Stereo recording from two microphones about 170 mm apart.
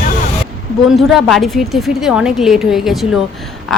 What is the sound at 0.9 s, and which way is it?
Speech, centre (ahead or behind).